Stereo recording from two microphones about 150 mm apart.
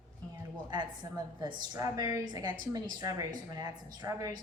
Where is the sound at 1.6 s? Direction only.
25° right (ahead or behind).